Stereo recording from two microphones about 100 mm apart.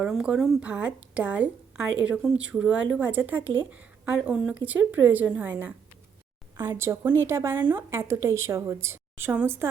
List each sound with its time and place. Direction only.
0.1 s speech: 5° right (ahead or behind)
0.6 s a woman's voice: 10° right (ahead or behind)
6.7 s a woman's voice: 25° right (ahead or behind)
7.9 s a woman's voice: 30° right (ahead or behind)